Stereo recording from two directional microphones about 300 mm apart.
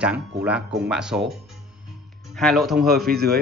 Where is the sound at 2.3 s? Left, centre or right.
Centre.